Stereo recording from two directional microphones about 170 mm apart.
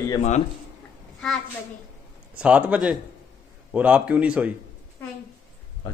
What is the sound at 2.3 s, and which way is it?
Speech, 5° right (ahead or behind).